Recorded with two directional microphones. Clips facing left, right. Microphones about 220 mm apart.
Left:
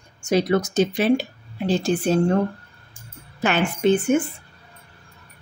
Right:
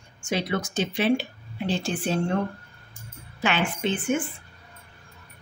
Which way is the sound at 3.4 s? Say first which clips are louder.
Left 6 dB; 45° left (ahead or behind).